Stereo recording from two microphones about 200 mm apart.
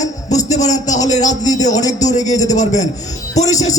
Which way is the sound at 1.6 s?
35° left (ahead or behind).